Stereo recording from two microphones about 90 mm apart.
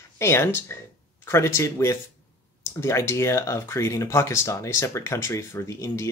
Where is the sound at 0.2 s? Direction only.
30° left (ahead or behind).